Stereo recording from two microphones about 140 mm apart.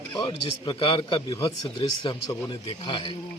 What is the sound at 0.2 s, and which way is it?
A man's voice, 35° left (ahead or behind).